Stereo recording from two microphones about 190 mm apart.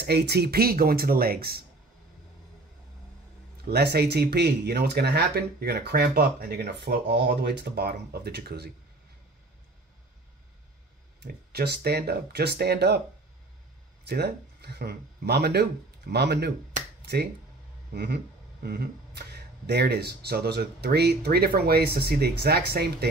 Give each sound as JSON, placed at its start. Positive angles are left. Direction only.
{"t": 0.0, "sound": "speech", "side_deg": -60}
{"t": 3.6, "sound": "speech", "side_deg": -60}
{"t": 11.2, "sound": "speech", "side_deg": -55}
{"t": 14.0, "sound": "speech", "side_deg": -60}